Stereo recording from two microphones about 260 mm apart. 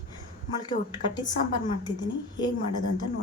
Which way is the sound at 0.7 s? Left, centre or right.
Centre.